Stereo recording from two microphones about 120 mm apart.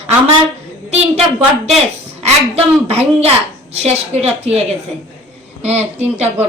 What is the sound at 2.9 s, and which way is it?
A woman's voice, 60° right (ahead or behind).